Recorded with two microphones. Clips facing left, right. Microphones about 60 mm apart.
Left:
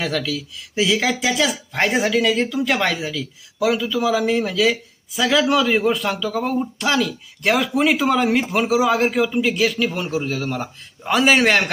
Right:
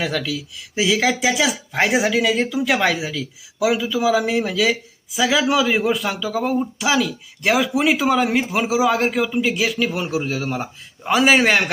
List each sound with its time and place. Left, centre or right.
0.0 s speech: centre